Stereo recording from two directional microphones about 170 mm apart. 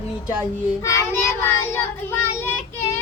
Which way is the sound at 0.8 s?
15° left (ahead or behind).